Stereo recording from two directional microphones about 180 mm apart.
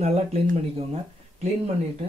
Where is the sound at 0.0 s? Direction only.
35° right (ahead or behind).